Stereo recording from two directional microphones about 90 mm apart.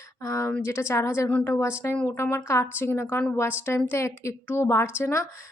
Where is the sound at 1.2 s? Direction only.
15° left (ahead or behind).